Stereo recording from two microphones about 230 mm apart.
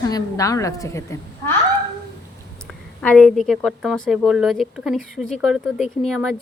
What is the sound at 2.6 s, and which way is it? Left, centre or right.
A woman's voice, centre.